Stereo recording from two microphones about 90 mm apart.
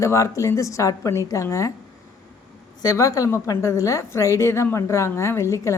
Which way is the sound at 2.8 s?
35° left (ahead or behind).